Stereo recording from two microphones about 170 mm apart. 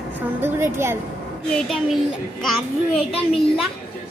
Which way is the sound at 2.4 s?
Centre (ahead or behind).